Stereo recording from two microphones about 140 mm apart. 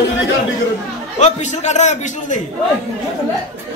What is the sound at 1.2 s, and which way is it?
A man's voice, 60° left (ahead or behind).